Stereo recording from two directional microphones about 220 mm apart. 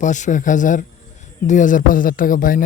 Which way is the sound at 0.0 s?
35° left (ahead or behind).